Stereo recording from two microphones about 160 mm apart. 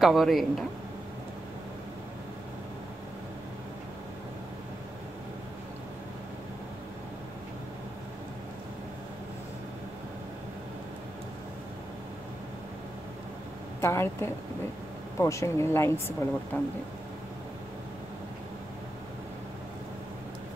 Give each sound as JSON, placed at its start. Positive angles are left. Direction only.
{"t": 0.0, "sound": "speech", "side_deg": 0}
{"t": 13.7, "sound": "speech", "side_deg": 15}